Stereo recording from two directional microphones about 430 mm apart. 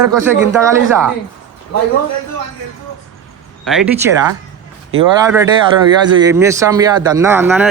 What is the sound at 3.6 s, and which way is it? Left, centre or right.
Speech, centre.